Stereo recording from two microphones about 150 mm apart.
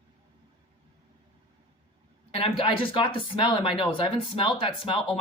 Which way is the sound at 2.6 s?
35° left (ahead or behind).